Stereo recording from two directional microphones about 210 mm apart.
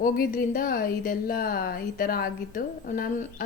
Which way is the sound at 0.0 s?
40° left (ahead or behind).